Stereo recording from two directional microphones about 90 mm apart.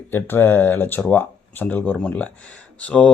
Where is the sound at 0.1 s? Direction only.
25° left (ahead or behind).